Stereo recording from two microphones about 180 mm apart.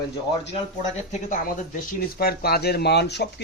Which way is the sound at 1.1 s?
45° left (ahead or behind).